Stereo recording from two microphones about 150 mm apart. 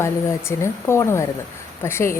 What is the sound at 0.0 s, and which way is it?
A woman's voice, 20° left (ahead or behind).